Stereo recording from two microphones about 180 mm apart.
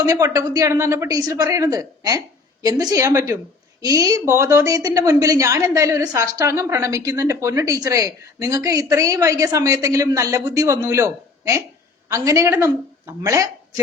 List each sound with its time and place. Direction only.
0.0 s a woman's voice: 20° right (ahead or behind)